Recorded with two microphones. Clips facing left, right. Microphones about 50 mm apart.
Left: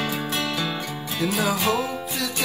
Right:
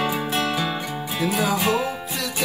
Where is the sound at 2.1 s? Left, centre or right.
Centre.